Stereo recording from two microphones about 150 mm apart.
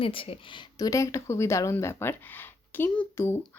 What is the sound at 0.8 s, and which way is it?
Speech, 20° left (ahead or behind).